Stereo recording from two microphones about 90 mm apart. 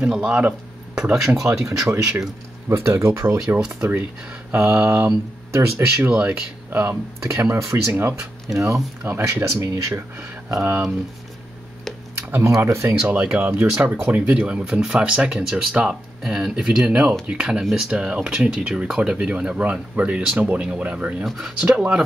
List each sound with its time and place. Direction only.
0.1 s speech: 10° right (ahead or behind)
1.3 s speech: 35° right (ahead or behind)
3.4 s speech: 15° right (ahead or behind)
5.0 s speech: 30° right (ahead or behind)
6.0 s speech: 20° right (ahead or behind); by 7.8 s 35° right (ahead or behind)
7.9 s speech: 20° right (ahead or behind)
12.3 s speech: 30° right (ahead or behind)
13.1 s speech: 15° right (ahead or behind)